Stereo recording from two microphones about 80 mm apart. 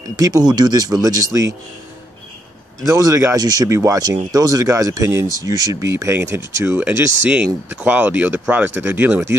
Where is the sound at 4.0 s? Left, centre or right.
Right.